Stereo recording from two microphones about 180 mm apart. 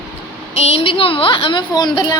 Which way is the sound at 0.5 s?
35° left (ahead or behind).